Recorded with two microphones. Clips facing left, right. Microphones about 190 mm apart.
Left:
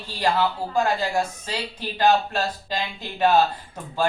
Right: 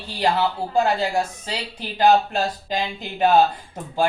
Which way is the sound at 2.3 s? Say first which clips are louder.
Right 2 dB; 20° right (ahead or behind).